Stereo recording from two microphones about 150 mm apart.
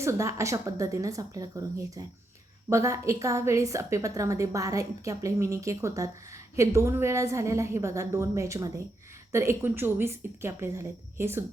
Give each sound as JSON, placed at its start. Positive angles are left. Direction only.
{"t": 0.0, "sound": "a woman's voice", "side_deg": -20}